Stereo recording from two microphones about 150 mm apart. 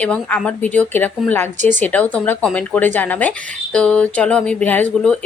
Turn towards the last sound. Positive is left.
turn(degrees=10)  # may be behind; listen again after turning